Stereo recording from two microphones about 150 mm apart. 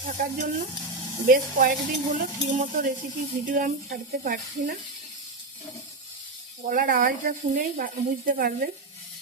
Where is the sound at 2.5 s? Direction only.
65° right (ahead or behind).